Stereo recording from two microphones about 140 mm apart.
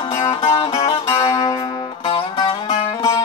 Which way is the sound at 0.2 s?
30° left (ahead or behind).